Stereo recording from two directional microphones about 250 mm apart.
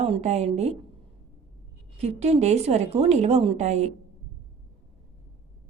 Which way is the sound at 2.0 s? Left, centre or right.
Right.